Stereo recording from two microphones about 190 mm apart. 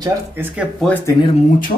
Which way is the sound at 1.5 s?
45° left (ahead or behind).